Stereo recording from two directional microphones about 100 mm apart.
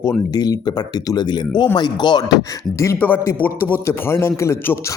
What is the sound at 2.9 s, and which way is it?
A man's voice, 20° left (ahead or behind).